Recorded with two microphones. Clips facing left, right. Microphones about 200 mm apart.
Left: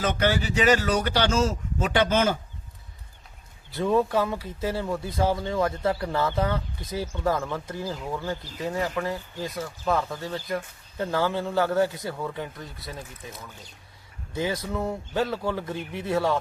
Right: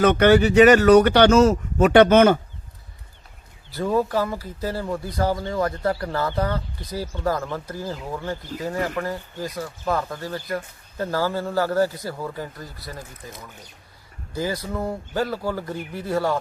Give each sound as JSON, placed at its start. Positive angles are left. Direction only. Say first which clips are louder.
{"t": 0.0, "sound": "speech", "louder": "right 10 dB", "side_deg": -65}
{"t": 3.7, "sound": "speech", "louder": "right 1 dB", "side_deg": 0}
{"t": 14.3, "sound": "speech", "louder": "right 1 dB", "side_deg": 0}